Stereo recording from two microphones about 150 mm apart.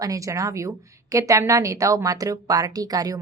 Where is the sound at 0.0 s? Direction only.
20° right (ahead or behind).